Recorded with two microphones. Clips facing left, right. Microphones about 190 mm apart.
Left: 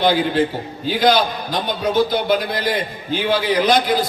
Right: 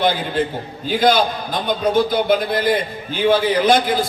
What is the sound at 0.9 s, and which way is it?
A man's voice, 50° right (ahead or behind).